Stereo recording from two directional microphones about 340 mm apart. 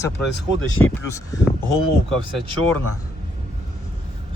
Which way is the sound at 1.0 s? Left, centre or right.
Centre.